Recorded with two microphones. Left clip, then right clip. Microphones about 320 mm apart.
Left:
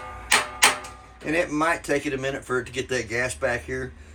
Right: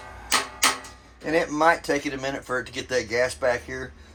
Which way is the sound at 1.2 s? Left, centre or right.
Centre.